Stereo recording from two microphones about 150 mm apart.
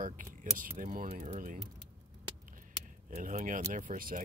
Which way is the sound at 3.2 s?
60° right (ahead or behind).